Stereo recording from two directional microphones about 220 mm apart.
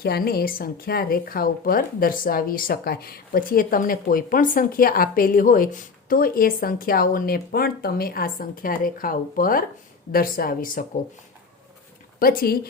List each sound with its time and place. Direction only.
0.0 s speech: 45° left (ahead or behind)
12.2 s speech: 40° left (ahead or behind)